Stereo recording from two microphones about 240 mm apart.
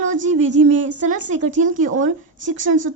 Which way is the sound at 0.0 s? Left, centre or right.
Right.